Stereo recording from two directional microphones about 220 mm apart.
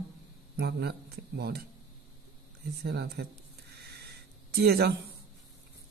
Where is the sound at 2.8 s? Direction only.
50° right (ahead or behind).